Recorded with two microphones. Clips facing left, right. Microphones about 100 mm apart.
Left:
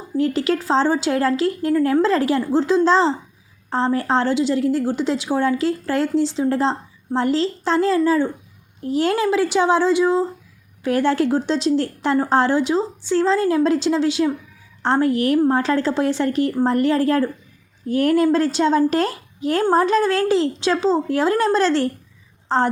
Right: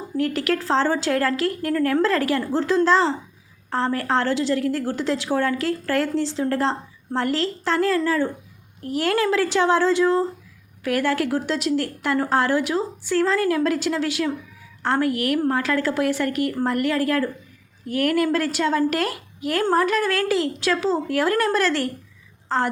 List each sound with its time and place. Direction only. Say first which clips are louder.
0.2 s a woman's voice: left 3 dB; 20° left (ahead or behind)